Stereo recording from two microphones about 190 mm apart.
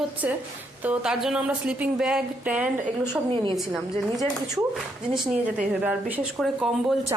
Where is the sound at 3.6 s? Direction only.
Centre (ahead or behind).